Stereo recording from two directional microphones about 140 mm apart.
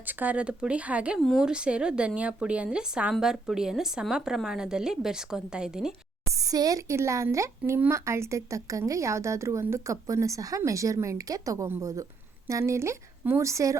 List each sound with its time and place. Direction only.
0.1 s speech: 10° right (ahead or behind)
6.4 s a woman's voice: 25° right (ahead or behind)